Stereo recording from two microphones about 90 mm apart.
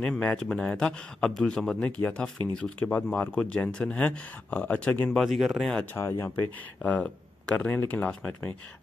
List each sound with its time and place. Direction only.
0.0 s speech: 10° left (ahead or behind)
1.8 s speech: 20° left (ahead or behind)
5.1 s speech: centre (ahead or behind)
5.9 s speech: 30° left (ahead or behind)
6.8 s speech: 10° left (ahead or behind)